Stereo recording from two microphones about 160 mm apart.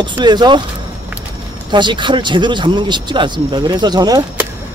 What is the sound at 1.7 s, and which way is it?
Speech, 30° right (ahead or behind).